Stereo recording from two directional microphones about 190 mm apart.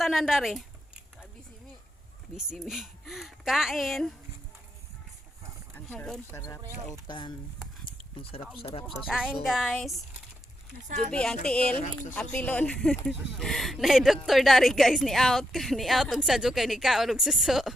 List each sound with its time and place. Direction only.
0.0 s speech: centre (ahead or behind)
2.3 s speech: 5° right (ahead or behind)
5.7 s a sound: 10° left (ahead or behind)
6.3 s speech: 15° left (ahead or behind); by 9.0 s 30° left (ahead or behind)
9.0 s speech: 5° right (ahead or behind)
10.8 s speech: 40° right (ahead or behind)
11.1 s speech: 5° left (ahead or behind)